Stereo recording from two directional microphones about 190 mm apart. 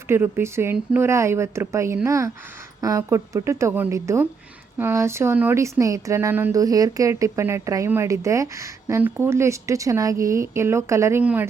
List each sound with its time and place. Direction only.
0.1 s speech: 10° right (ahead or behind)